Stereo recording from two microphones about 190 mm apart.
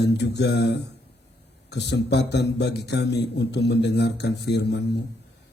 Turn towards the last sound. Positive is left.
turn(degrees=65)  # may be behind; listen again after turning